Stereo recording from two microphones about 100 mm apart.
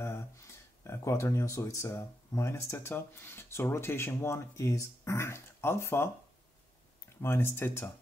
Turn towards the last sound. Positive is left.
turn(degrees=25)  # may be behind; listen again after turning